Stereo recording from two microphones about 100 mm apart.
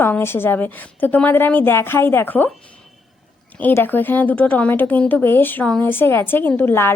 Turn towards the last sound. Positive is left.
turn(degrees=25)  # may be behind; listen again after turning